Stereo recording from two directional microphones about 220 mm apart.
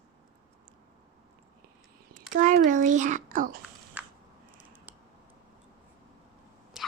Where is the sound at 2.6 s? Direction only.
35° right (ahead or behind).